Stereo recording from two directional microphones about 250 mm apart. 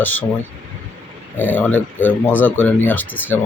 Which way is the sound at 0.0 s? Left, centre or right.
Centre.